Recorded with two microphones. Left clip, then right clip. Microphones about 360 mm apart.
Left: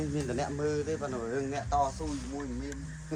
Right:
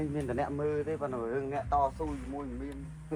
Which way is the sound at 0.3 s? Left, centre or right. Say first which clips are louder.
Right 1 dB; centre.